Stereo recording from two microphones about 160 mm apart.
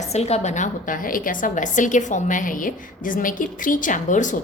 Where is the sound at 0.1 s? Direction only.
40° left (ahead or behind).